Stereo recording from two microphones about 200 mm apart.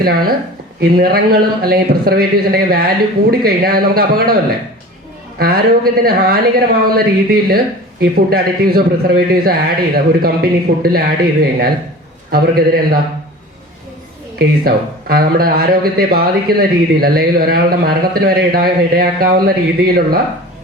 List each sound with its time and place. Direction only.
0.8 s a man's voice: 50° right (ahead or behind)
5.4 s a man's voice: 50° right (ahead or behind)
14.3 s a man's voice: 50° right (ahead or behind)